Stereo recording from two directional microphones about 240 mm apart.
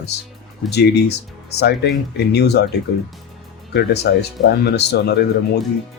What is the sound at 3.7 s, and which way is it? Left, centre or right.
Speech, left.